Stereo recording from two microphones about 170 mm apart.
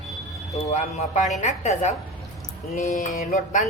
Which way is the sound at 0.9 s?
45° left (ahead or behind).